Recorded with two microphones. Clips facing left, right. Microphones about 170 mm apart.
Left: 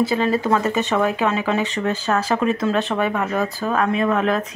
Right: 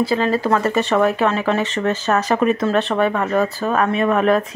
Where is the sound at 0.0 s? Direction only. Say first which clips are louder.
Right 1 dB; 20° left (ahead or behind).